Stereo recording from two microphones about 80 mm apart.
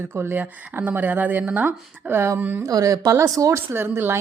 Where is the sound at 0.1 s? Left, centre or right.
Right.